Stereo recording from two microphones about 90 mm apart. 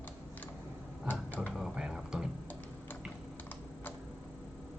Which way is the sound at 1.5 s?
5° right (ahead or behind).